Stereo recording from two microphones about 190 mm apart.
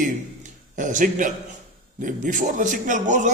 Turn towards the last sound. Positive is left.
turn(degrees=-40)  # may be behind; listen again after turning